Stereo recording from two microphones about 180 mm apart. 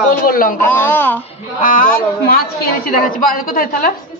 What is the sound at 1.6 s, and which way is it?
A woman's voice, 50° left (ahead or behind).